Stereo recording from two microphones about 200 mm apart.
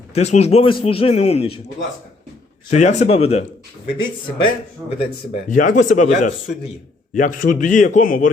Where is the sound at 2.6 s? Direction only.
35° left (ahead or behind).